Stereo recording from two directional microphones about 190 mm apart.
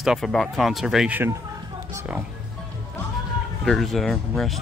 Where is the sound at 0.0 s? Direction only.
Centre (ahead or behind).